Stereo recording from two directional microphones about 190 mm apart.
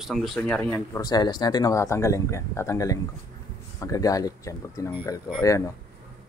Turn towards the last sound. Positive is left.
turn(degrees=20)  # may be behind; listen again after turning